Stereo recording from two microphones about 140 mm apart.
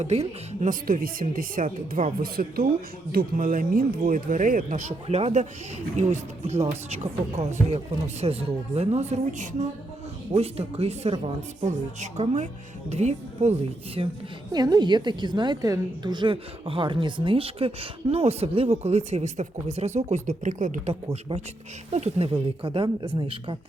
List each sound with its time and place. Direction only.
0.0 s a woman's voice: 50° right (ahead or behind)
0.7 s a woman's voice: 85° right; by 9.6 s 60° right (ahead or behind)
10.3 s a woman's voice: 45° right (ahead or behind)
14.5 s a woman's voice: 30° right (ahead or behind)